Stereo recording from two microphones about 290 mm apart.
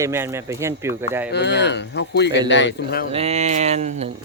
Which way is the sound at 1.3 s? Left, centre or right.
Left.